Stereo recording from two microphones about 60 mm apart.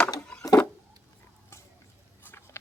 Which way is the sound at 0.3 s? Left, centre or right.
Centre.